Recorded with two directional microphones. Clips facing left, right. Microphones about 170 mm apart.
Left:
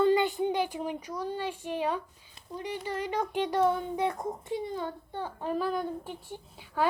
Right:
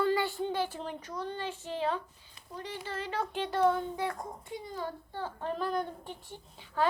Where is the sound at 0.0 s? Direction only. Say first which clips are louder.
Left 5 dB; 20° left (ahead or behind).